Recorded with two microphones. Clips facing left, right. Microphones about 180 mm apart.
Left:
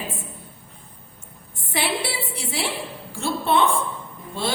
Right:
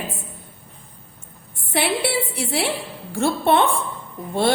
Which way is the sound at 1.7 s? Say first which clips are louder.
Right 4 dB; 60° right (ahead or behind).